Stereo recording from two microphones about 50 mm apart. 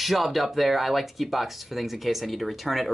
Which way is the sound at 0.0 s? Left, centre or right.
Centre.